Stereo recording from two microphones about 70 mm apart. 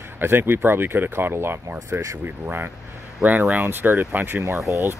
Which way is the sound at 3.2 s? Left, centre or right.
Right.